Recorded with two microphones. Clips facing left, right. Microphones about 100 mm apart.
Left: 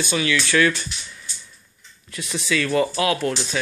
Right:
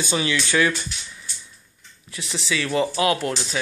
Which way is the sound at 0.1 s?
25° right (ahead or behind).